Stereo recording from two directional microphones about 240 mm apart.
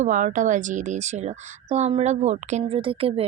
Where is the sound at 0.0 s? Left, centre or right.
Right.